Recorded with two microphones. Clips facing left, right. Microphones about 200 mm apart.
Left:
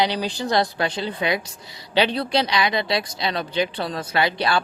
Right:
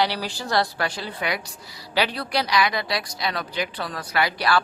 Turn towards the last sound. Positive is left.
turn(degrees=25)  # may be behind; listen again after turning